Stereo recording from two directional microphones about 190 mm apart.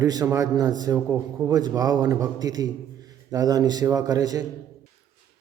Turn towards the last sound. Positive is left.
turn(degrees=-20)  # may be behind; listen again after turning